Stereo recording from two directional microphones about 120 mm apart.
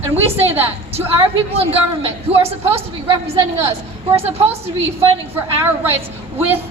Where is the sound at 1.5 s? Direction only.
55° right (ahead or behind).